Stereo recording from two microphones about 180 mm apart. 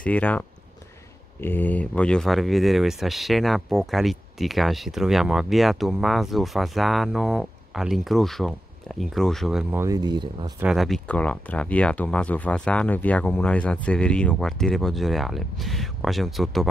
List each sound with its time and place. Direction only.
0.0 s speech: 10° left (ahead or behind)
9.8 s speech: 20° right (ahead or behind)
10.6 s speech: centre (ahead or behind)